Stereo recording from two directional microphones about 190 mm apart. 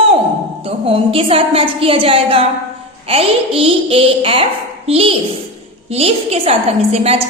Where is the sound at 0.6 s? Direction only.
30° right (ahead or behind).